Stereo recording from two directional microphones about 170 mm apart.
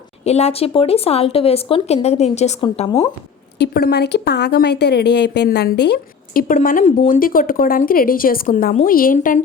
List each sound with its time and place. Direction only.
0.3 s speech: 40° left (ahead or behind)
3.6 s a woman's voice: 75° left (ahead or behind); by 9.4 s 50° left (ahead or behind)